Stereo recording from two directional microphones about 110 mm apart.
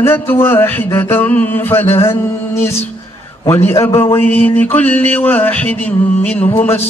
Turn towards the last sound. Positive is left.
turn(degrees=20)  # may be behind; listen again after turning